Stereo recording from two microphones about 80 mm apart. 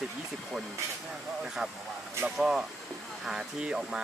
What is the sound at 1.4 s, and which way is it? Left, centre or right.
Speech, centre.